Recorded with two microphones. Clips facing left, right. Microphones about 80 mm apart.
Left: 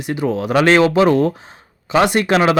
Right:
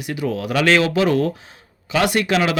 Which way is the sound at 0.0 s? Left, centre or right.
Left.